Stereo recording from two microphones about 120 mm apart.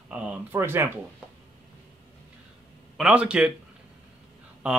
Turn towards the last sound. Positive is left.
turn(degrees=-10)  # may be behind; listen again after turning